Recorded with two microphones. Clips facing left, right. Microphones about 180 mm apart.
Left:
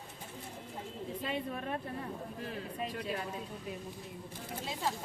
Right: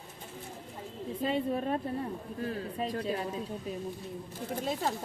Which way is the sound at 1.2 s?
35° right (ahead or behind).